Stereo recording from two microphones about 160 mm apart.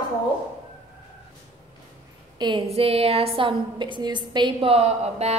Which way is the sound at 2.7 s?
40° right (ahead or behind).